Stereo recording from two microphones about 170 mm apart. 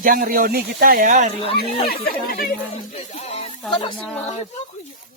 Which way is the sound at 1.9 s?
60° left (ahead or behind).